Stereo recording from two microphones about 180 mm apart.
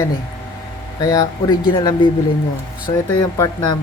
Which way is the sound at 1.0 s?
20° left (ahead or behind).